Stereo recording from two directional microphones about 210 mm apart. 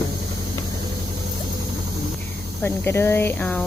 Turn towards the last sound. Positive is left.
turn(degrees=5)  # may be behind; listen again after turning